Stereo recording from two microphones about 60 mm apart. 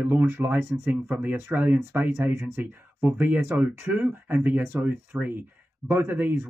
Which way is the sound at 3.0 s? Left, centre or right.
Right.